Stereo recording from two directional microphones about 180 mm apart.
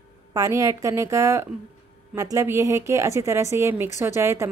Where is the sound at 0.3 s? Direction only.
20° right (ahead or behind).